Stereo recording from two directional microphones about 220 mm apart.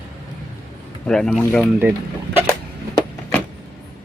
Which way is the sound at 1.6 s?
10° right (ahead or behind).